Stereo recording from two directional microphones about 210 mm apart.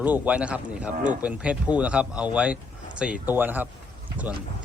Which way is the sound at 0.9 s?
35° right (ahead or behind).